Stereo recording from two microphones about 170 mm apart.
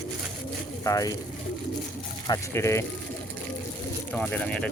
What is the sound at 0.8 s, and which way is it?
Speech, 20° left (ahead or behind).